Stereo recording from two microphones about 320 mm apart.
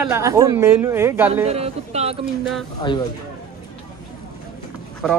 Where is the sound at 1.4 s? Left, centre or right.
Centre.